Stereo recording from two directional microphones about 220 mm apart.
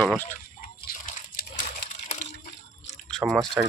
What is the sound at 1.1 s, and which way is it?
Water, 40° left (ahead or behind).